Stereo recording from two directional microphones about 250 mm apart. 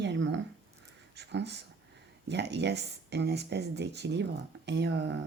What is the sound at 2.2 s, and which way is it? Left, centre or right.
Speech, right.